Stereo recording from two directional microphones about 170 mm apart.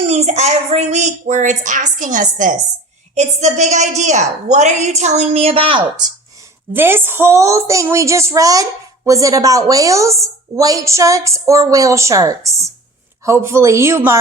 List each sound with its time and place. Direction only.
0.1 s a woman's voice: 40° right (ahead or behind)
6.3 s a woman's voice: 15° right (ahead or behind)